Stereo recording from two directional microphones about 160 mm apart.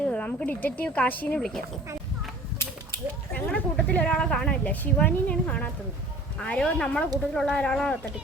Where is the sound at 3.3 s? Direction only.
5° left (ahead or behind).